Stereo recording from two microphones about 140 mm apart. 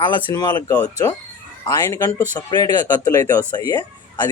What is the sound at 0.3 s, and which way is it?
Speech, 30° left (ahead or behind).